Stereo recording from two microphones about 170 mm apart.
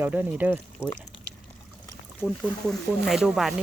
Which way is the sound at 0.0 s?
10° right (ahead or behind).